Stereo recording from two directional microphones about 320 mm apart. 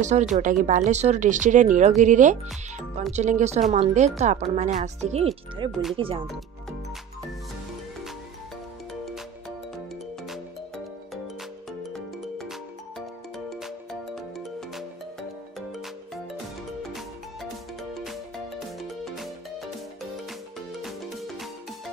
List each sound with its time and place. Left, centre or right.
0.0 s speech: right
5.7 s speech: centre
5.9 s speech: centre
18.8 s music: centre
20.8 s music: centre